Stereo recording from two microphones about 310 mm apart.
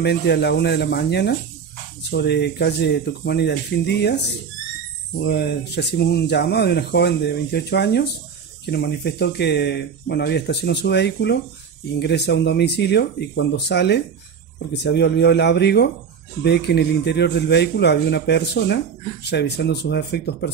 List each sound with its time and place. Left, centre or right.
0.0 s speech: left